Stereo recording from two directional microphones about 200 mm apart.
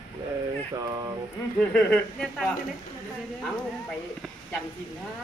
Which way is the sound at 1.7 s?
5° left (ahead or behind).